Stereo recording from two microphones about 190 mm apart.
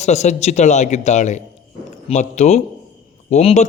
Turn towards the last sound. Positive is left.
turn(degrees=35)  # may be behind; listen again after turning